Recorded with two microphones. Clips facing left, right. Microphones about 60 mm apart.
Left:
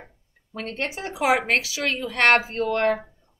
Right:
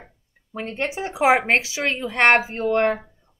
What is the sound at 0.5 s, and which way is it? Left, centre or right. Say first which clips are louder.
A woman's voice: right 3 dB; right.